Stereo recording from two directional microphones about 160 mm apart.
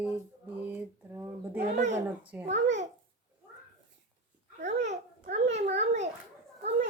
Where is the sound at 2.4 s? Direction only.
45° right (ahead or behind).